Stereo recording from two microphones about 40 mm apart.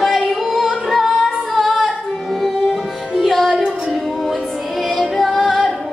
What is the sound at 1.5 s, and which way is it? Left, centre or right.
Female singing, centre.